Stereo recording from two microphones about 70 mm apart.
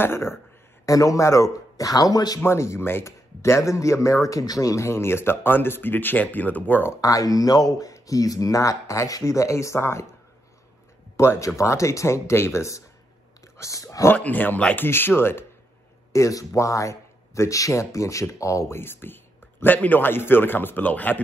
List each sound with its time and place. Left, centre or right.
0.0 s speech: left
0.8 s speech: left
2.4 s speech: left
4.8 s a man's voice: left
7.0 s speech: left
11.1 s speech: left
14.1 s a man's voice: left
16.1 s speech: left
18.8 s a man's voice: left